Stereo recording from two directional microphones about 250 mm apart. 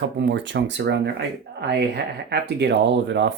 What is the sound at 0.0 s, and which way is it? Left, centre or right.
Speech, right.